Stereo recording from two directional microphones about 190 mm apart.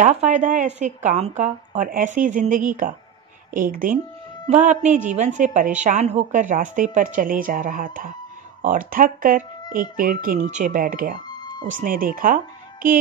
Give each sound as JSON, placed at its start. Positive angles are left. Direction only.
{"t": 0.0, "sound": "speech", "side_deg": -40}
{"t": 11.2, "sound": "music", "side_deg": 20}
{"t": 11.6, "sound": "speech", "side_deg": -45}
{"t": 12.8, "sound": "child singing", "side_deg": -45}